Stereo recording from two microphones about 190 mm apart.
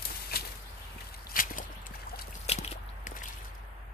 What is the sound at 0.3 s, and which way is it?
Bird flight, 55° left (ahead or behind).